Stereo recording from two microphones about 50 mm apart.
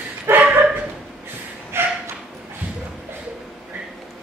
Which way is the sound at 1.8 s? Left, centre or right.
Right.